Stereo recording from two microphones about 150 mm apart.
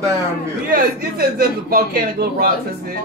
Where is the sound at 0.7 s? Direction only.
90° right.